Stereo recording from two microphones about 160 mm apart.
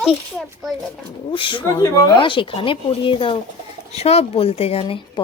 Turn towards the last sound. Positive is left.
turn(degrees=35)  # may be behind; listen again after turning